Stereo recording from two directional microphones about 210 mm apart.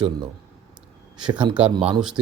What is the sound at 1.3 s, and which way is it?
Speech, 20° right (ahead or behind).